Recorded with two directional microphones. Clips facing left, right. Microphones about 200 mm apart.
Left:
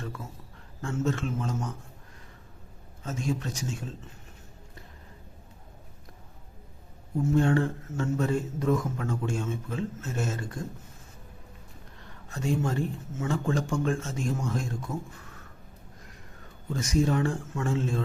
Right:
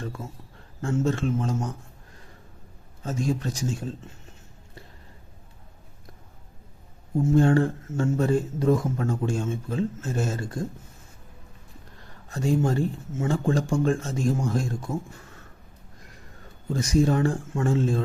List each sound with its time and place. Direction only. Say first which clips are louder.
0.8 s speech: right 4 dB; 30° right (ahead or behind)
3.0 s speech: right 4 dB; 35° right (ahead or behind)
7.3 s speech: right 4 dB; 35° right (ahead or behind)
12.3 s speech: right 5 dB; 35° right (ahead or behind)
16.7 s speech: right 4 dB; 35° right (ahead or behind)